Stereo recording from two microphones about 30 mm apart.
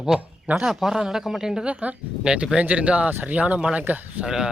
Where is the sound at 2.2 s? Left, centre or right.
Right.